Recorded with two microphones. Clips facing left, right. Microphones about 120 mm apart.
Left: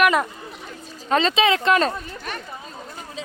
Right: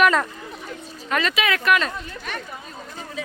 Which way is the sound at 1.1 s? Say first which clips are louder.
Left 4 dB; 30° left (ahead or behind).